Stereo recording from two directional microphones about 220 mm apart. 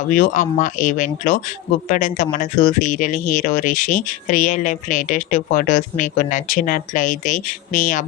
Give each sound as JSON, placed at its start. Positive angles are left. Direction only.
{"t": 0.1, "sound": "speech", "side_deg": 35}